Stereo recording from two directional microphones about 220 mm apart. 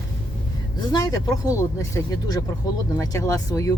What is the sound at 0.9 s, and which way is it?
Speech, 15° left (ahead or behind).